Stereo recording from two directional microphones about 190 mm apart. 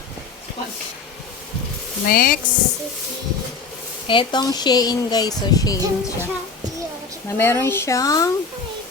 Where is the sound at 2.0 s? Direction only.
50° left (ahead or behind).